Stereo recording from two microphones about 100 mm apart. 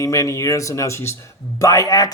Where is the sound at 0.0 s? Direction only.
30° left (ahead or behind).